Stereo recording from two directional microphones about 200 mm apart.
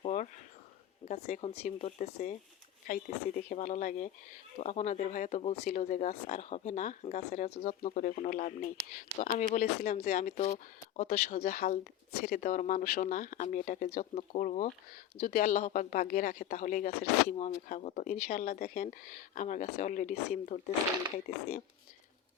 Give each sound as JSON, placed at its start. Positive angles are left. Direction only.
{"t": 0.0, "sound": "a sound", "side_deg": 35}
{"t": 1.0, "sound": "speech", "side_deg": 35}
{"t": 17.3, "sound": "speech", "side_deg": 35}